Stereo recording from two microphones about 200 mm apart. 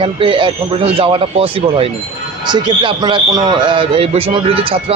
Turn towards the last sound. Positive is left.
turn(degrees=-30)  # may be behind; listen again after turning